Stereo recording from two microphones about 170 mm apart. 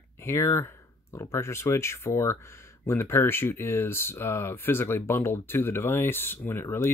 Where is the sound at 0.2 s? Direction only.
15° left (ahead or behind).